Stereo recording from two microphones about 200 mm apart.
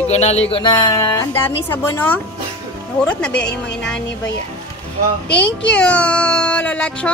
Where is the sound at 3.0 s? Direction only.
5° left (ahead or behind).